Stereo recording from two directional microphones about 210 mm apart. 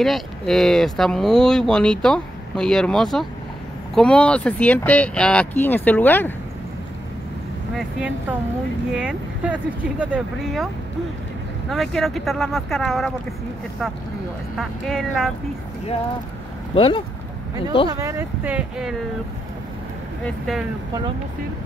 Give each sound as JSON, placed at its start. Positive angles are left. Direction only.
{"t": 0.0, "sound": "speech", "side_deg": 0}
{"t": 7.7, "sound": "speech", "side_deg": -5}
{"t": 11.7, "sound": "speech", "side_deg": 0}
{"t": 14.6, "sound": "speech", "side_deg": 0}
{"t": 16.7, "sound": "speech", "side_deg": 25}
{"t": 17.8, "sound": "speech", "side_deg": -15}
{"t": 20.2, "sound": "speech", "side_deg": 0}